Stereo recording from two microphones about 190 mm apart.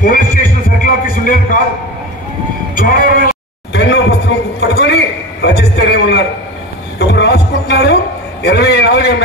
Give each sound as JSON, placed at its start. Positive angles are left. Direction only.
{"t": 0.0, "sound": "music", "side_deg": 45}
{"t": 2.7, "sound": "bleat", "side_deg": 45}
{"t": 3.7, "sound": "a sound", "side_deg": 65}